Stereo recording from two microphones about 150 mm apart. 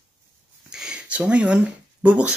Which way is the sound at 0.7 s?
5° right (ahead or behind).